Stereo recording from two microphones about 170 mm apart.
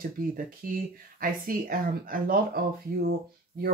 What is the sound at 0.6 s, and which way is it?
Speech, 55° right (ahead or behind).